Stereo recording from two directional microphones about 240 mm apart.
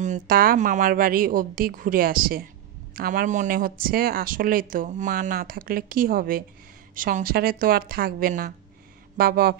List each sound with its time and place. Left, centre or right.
0.0 s speech: right